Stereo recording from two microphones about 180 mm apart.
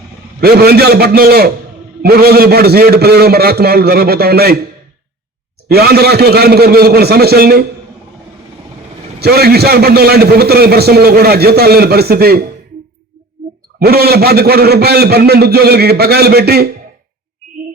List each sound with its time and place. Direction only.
0.3 s a man's voice: 60° right (ahead or behind)
5.6 s a man's voice: 60° right (ahead or behind)
9.2 s a man's voice: 60° right (ahead or behind)
13.7 s a man's voice: 60° right (ahead or behind)